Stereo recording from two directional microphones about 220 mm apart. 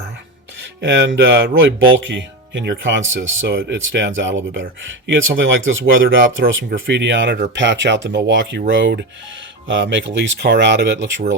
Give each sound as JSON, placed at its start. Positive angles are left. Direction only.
{"t": 0.8, "sound": "speech", "side_deg": -55}